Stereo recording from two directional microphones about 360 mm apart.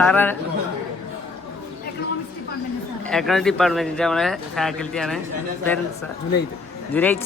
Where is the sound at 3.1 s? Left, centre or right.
Centre.